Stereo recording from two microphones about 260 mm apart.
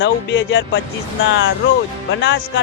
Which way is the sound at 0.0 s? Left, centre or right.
Left.